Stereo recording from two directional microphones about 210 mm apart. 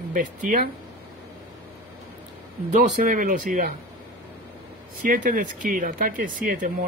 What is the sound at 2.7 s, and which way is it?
Speech, 35° right (ahead or behind).